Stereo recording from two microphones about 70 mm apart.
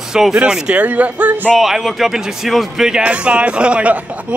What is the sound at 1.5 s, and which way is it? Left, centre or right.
A man's voice, centre.